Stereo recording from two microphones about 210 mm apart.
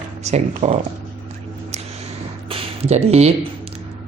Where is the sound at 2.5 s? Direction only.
30° right (ahead or behind).